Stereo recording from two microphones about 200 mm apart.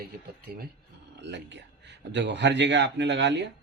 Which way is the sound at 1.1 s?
60° right (ahead or behind).